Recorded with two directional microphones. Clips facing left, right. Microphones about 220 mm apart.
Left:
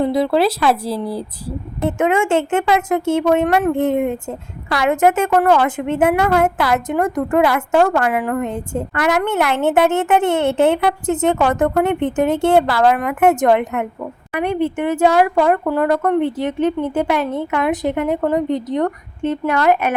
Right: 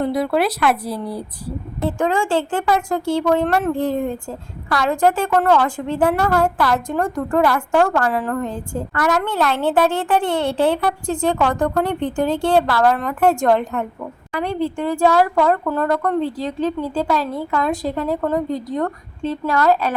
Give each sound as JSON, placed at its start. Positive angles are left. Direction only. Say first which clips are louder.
{"t": 0.0, "sound": "a woman's voice", "louder": "left 3 dB", "side_deg": 25}